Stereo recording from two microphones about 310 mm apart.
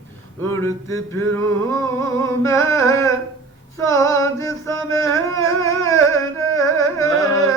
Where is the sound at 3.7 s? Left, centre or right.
Centre.